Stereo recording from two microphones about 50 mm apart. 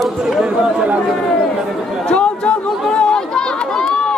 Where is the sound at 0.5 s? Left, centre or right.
Centre.